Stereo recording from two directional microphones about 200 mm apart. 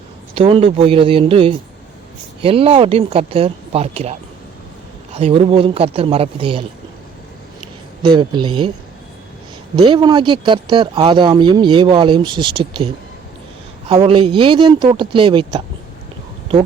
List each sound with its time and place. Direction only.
0.3 s speech: 25° right (ahead or behind)
5.1 s speech: 30° right (ahead or behind)
8.0 s speech: 25° right (ahead or behind)
9.7 s speech: 25° right (ahead or behind)